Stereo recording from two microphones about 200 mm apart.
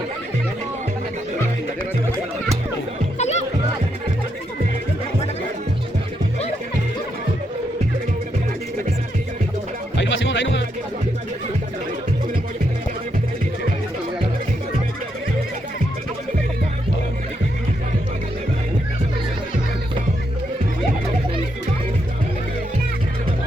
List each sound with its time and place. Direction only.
3.2 s music: 35° left (ahead or behind)
10.0 s music: 70° left (ahead or behind)